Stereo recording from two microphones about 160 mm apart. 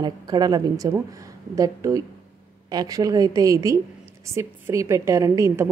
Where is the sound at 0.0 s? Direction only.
25° right (ahead or behind).